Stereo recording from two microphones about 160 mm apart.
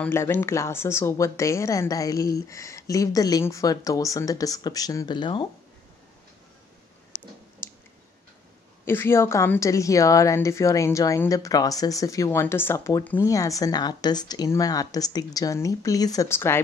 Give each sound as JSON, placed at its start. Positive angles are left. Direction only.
{"t": 0.0, "sound": "a woman's voice", "side_deg": 15}
{"t": 7.6, "sound": "clicking", "side_deg": 15}
{"t": 8.8, "sound": "a woman's voice", "side_deg": 15}